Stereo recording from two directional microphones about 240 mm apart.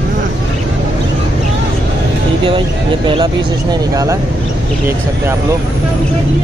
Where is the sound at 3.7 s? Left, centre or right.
Centre.